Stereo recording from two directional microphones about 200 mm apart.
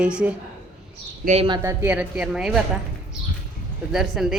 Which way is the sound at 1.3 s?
25° right (ahead or behind).